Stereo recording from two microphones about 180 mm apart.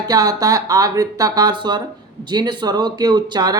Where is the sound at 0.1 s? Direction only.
20° right (ahead or behind).